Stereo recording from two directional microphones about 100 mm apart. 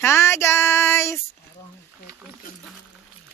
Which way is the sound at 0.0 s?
25° left (ahead or behind).